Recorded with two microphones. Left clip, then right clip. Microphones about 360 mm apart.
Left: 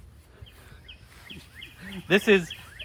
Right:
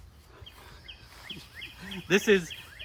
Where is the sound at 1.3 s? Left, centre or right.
Right.